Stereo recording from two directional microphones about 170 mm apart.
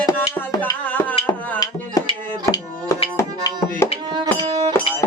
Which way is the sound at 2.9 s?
15° left (ahead or behind).